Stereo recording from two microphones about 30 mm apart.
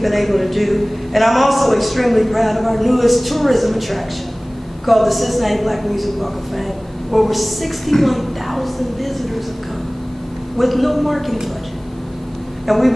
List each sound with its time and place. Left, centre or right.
0.0 s a man's voice: centre
10.6 s a man's voice: centre
12.6 s speech: centre